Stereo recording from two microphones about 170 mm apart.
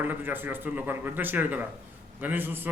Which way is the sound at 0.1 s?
10° right (ahead or behind).